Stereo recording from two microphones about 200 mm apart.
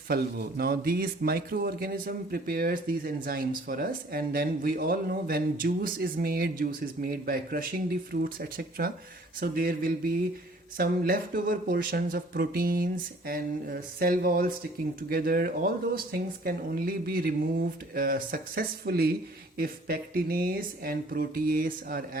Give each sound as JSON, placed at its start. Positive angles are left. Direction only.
{"t": 0.1, "sound": "speech", "side_deg": -50}